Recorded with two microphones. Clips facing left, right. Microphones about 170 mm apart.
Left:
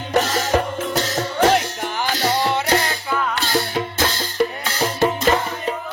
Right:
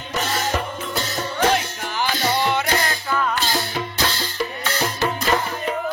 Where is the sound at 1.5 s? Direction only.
50° left (ahead or behind).